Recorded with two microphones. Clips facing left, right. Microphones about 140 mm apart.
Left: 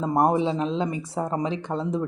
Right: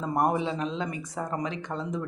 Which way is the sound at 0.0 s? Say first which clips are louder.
Left 5 dB; 25° left (ahead or behind).